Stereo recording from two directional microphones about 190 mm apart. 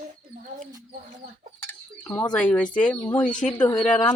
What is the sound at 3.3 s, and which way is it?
Speech, 40° left (ahead or behind).